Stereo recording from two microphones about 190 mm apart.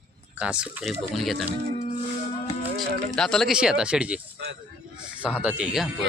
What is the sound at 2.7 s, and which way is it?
Speech, centre (ahead or behind).